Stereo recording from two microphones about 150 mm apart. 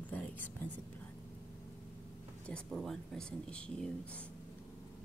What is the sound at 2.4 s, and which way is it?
Speech, 5° left (ahead or behind).